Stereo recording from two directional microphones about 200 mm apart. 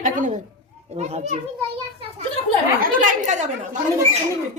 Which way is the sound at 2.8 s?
40° right (ahead or behind).